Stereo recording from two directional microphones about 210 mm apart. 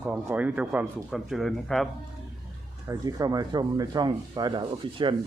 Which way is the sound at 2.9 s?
15° right (ahead or behind).